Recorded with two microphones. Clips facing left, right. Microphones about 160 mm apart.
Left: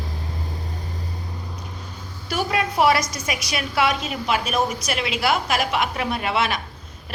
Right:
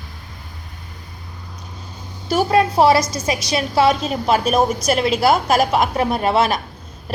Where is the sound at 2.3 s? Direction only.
35° right (ahead or behind).